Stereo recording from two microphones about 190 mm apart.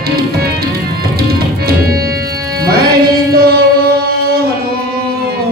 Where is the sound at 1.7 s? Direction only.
55° right (ahead or behind).